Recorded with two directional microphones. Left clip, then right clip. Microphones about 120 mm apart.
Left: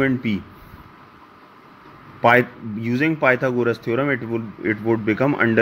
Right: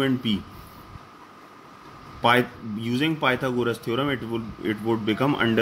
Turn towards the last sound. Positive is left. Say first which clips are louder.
# left 4 dB
turn(degrees=35)  # may be behind; listen again after turning